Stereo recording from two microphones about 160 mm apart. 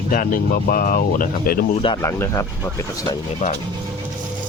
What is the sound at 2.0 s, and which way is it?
Speech, 20° left (ahead or behind).